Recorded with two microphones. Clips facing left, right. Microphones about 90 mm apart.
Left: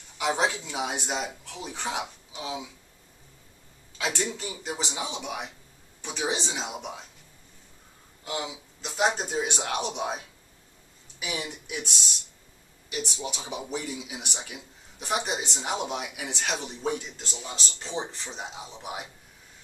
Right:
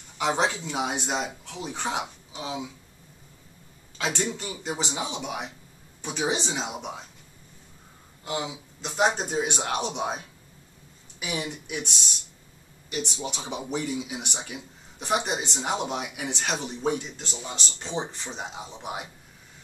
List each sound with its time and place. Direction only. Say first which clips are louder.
0.2 s a man's voice: right 1 dB; centre (ahead or behind)
4.0 s a man's voice: right 1 dB; centre (ahead or behind)
8.3 s a man's voice: right 2 dB; centre (ahead or behind)